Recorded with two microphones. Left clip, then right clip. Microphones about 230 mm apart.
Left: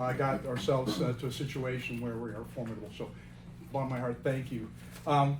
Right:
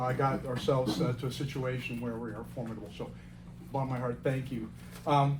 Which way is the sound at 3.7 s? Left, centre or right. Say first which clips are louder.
Even; right.